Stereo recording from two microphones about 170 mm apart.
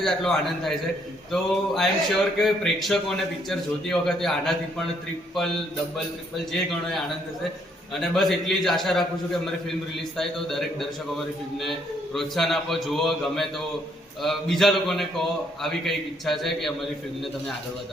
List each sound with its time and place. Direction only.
0.0 s a man's voice: 5° left (ahead or behind)
7.9 s a man's voice: centre (ahead or behind)